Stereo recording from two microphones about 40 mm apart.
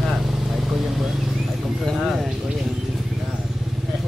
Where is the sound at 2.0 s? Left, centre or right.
Centre.